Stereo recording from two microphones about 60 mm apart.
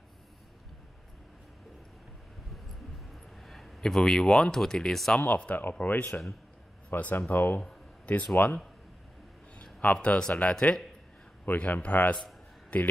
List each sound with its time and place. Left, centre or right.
3.4 s speech: centre
5.2 s speech: left
9.6 s a sound: left
10.0 s speech: centre
11.4 s speech: left